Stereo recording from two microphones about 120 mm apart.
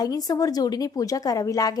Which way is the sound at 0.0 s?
35° left (ahead or behind).